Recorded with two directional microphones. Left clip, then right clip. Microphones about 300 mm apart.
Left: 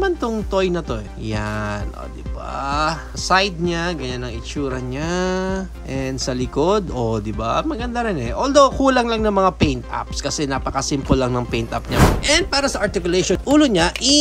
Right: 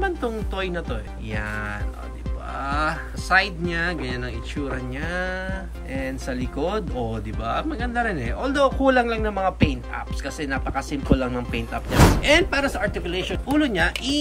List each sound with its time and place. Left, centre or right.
0.0 s speech: centre
11.9 s speech: centre